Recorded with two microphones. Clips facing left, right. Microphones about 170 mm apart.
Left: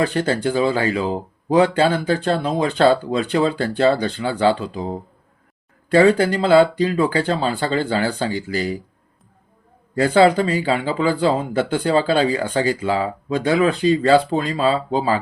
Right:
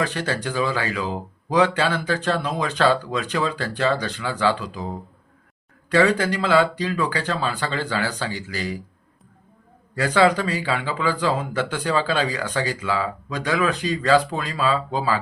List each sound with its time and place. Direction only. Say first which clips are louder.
0.0 s speech: left 6 dB; 30° left (ahead or behind)
10.0 s speech: left 4 dB; 30° left (ahead or behind)